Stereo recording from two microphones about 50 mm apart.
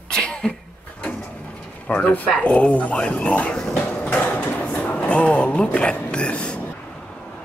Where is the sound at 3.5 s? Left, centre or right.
Centre.